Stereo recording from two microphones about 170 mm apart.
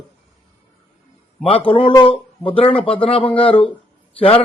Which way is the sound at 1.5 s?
30° left (ahead or behind).